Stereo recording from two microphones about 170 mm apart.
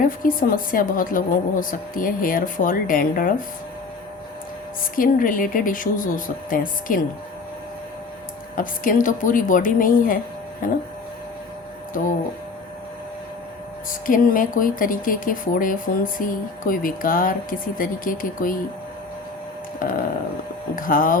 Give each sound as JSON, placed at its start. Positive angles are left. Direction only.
{"t": 0.0, "sound": "a woman's voice", "side_deg": 55}
{"t": 4.8, "sound": "a woman's voice", "side_deg": 55}
{"t": 8.5, "sound": "a woman's voice", "side_deg": 55}
{"t": 14.1, "sound": "speech", "side_deg": 55}
{"t": 19.8, "sound": "a woman's voice", "side_deg": 55}